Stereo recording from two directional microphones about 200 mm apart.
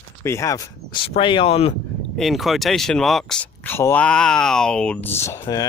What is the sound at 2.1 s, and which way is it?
Speech, centre (ahead or behind).